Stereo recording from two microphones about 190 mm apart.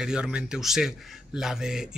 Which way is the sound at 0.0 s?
5° right (ahead or behind).